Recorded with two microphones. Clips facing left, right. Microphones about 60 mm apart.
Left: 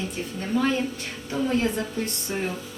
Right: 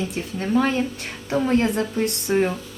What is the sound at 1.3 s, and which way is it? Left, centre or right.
Speech, right.